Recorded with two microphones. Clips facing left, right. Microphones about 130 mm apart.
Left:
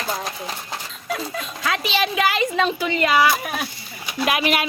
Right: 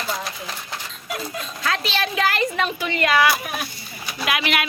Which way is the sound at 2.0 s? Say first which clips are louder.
Left 3 dB; 15° left (ahead or behind).